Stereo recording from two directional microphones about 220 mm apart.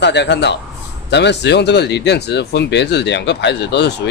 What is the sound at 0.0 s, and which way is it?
Speech, 50° left (ahead or behind).